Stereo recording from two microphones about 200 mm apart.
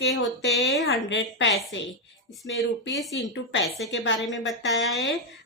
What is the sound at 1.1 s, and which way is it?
Speech, 65° left (ahead or behind).